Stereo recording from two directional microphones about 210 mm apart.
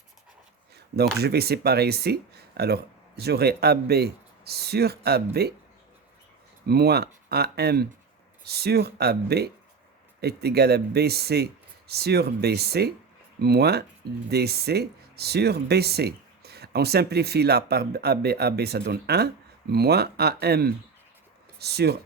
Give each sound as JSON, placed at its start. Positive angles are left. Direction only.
{"t": 0.9, "sound": "speech", "side_deg": -50}
{"t": 6.7, "sound": "speech", "side_deg": -50}